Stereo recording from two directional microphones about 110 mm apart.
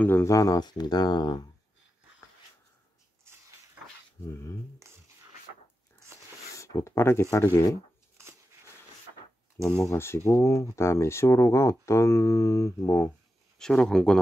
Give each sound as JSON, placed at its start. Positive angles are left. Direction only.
{"t": 0.0, "sound": "speech", "side_deg": 25}
{"t": 4.3, "sound": "speech", "side_deg": 25}
{"t": 6.6, "sound": "speech", "side_deg": 30}
{"t": 9.8, "sound": "speech", "side_deg": 25}
{"t": 13.6, "sound": "speech", "side_deg": 5}